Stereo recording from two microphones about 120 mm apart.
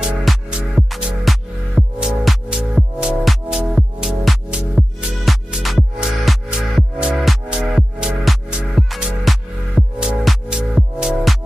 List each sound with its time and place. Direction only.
0.0 s music: 5° right (ahead or behind)